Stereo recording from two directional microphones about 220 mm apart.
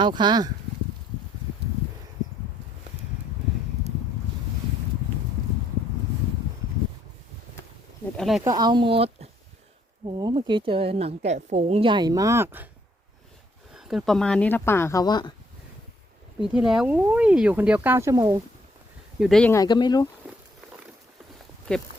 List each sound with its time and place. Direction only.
0.0 s a woman's voice: 20° right (ahead or behind)
8.1 s speech: centre (ahead or behind)
8.4 s a woman's voice: 20° right (ahead or behind)
10.2 s a woman's voice: 20° right (ahead or behind)
13.7 s speech: centre (ahead or behind); by 15.3 s 20° left (ahead or behind)
16.5 s speech: 5° right (ahead or behind)
19.2 s speech: centre (ahead or behind)
19.5 s speech: 20° left (ahead or behind)